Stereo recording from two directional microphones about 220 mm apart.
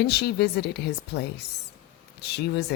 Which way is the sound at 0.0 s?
50° left (ahead or behind).